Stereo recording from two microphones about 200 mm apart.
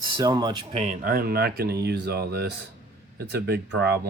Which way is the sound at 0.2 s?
20° right (ahead or behind).